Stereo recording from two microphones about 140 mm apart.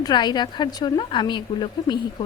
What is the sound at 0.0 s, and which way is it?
A woman's voice, 30° left (ahead or behind).